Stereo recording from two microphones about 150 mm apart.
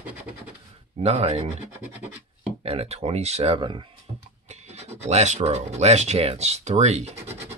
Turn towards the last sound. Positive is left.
turn(degrees=-50)  # may be behind; listen again after turning